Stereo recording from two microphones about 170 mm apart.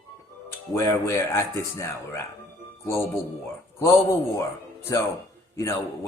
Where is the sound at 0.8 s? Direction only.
15° left (ahead or behind).